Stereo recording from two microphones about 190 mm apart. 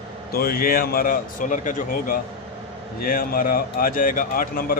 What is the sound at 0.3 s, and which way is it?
A man's voice, 50° left (ahead or behind).